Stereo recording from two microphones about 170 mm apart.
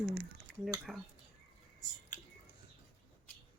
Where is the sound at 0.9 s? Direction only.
5° right (ahead or behind).